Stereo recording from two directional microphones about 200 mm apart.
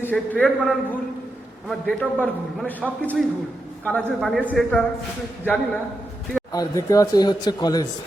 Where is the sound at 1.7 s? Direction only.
5° left (ahead or behind).